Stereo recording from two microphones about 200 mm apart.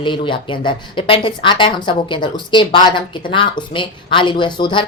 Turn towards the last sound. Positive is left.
turn(degrees=20)  # may be behind; listen again after turning